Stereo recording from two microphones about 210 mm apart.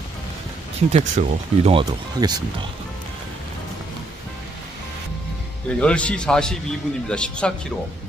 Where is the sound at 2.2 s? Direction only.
20° right (ahead or behind).